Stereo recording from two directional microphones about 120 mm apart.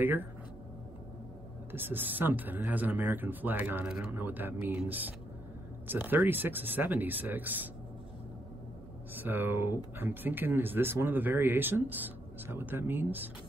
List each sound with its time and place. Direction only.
0.0 s speech: 15° right (ahead or behind)
1.7 s speech: 15° right (ahead or behind)
9.1 s speech: 15° right (ahead or behind)